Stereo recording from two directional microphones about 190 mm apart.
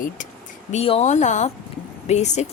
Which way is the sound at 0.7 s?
35° left (ahead or behind).